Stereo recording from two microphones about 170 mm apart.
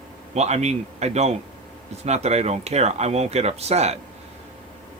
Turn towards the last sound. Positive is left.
turn(degrees=-40)  # may be behind; listen again after turning